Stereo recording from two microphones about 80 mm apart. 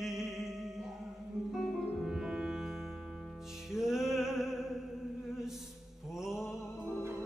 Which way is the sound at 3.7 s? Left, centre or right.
Centre.